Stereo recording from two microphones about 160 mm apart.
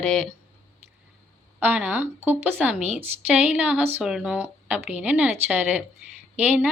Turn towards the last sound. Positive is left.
turn(degrees=-10)  # may be behind; listen again after turning